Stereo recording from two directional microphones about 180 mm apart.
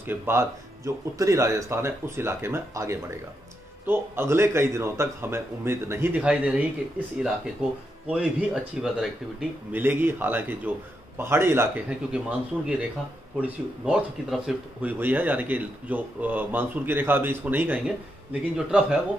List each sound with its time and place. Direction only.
0.0 s speech: 15° right (ahead or behind)